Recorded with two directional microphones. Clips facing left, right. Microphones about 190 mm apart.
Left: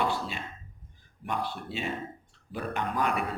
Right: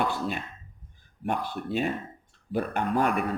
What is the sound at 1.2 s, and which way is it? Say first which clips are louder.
Speech: right 3 dB; 50° right (ahead or behind).